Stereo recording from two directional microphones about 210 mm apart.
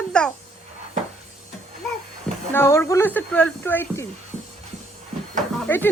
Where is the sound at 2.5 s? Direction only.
10° left (ahead or behind).